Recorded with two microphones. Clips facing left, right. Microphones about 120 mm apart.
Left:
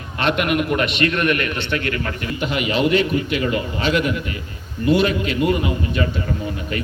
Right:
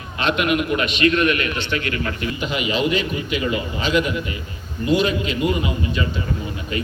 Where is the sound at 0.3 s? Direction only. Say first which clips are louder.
Even; 50° left (ahead or behind).